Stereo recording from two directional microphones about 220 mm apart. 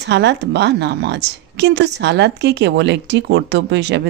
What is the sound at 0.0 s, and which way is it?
A woman's voice, 50° right (ahead or behind).